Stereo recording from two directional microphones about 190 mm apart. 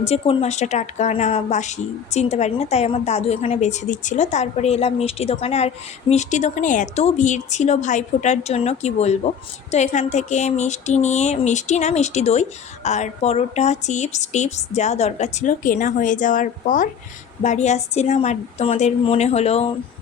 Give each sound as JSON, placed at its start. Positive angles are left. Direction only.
{"t": 0.0, "sound": "speech", "side_deg": 30}